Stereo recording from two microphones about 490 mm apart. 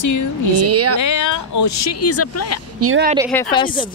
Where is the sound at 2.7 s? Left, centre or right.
Right.